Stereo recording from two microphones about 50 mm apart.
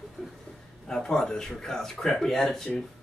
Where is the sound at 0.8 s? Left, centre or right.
Centre.